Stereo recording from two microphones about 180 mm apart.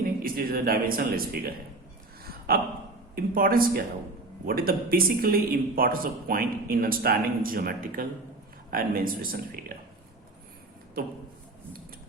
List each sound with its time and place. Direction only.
0.0 s speech: 55° right (ahead or behind)
2.2 s a sound: 55° right (ahead or behind)
3.2 s speech: 55° right (ahead or behind)